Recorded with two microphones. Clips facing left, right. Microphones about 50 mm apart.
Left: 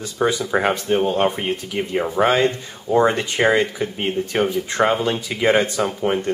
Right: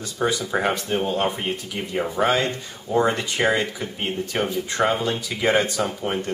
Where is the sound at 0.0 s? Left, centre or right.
Centre.